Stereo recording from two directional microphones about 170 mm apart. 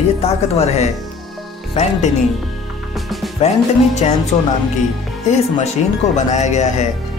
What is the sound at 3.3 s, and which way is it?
Music, 40° left (ahead or behind).